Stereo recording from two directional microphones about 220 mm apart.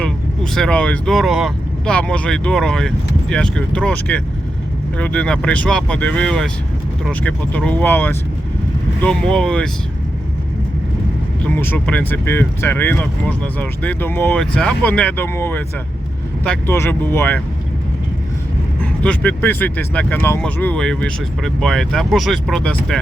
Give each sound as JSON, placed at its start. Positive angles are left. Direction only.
{"t": 0.5, "sound": "speech", "side_deg": 5}
{"t": 11.4, "sound": "speech", "side_deg": 10}
{"t": 18.8, "sound": "speech", "side_deg": 5}